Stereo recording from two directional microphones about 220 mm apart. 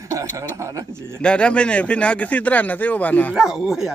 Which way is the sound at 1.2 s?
5° left (ahead or behind).